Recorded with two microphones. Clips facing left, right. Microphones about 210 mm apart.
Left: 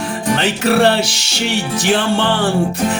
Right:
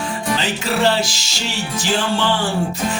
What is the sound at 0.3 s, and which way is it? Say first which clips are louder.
Music: left 8 dB; 60° left (ahead or behind).